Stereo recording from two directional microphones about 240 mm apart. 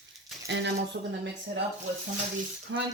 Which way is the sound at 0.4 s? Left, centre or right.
Right.